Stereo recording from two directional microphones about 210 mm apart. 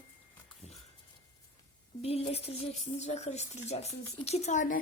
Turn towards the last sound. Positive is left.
turn(degrees=35)  # may be behind; listen again after turning